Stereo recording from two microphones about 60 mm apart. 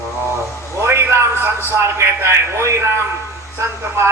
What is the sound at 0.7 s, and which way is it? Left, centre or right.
A man's voice, right.